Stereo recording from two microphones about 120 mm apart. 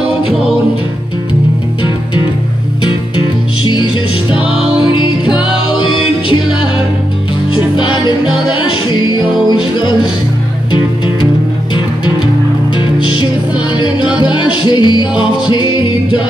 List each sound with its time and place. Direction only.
2.8 s music: 40° left (ahead or behind)
4.4 s music: 5° right (ahead or behind)
5.7 s music: 45° left (ahead or behind)
7.5 s music: 40° left (ahead or behind)
9.5 s music: 40° left (ahead or behind)
11.7 s music: 40° left (ahead or behind)